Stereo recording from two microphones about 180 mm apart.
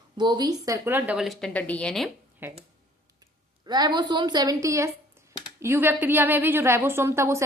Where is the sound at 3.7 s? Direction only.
20° right (ahead or behind).